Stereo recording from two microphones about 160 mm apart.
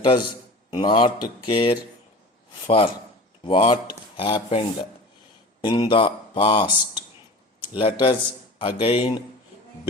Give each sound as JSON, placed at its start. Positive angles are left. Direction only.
{"t": 0.0, "sound": "a man's voice", "side_deg": 30}
{"t": 7.7, "sound": "speech", "side_deg": 30}